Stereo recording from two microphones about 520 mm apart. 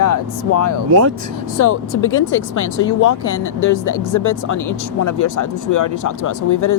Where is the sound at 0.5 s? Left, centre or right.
Left.